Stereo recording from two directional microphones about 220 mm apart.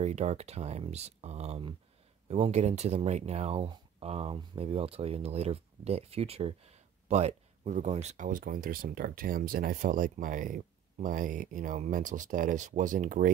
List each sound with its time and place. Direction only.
0.0 s speech: 30° right (ahead or behind)